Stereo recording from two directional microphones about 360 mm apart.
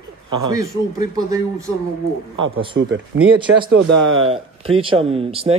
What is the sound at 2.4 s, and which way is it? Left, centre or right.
Speech, right.